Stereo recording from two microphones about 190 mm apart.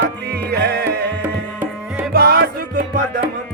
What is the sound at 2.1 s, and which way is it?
Music, 55° right (ahead or behind).